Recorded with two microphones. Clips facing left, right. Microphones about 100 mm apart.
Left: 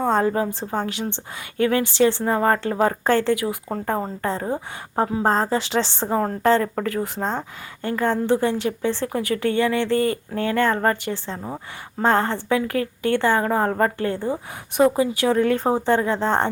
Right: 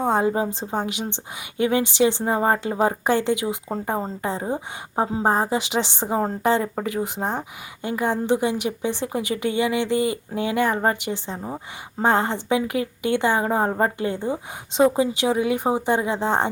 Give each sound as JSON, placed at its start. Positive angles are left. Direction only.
{"t": 0.0, "sound": "a woman's voice", "side_deg": -15}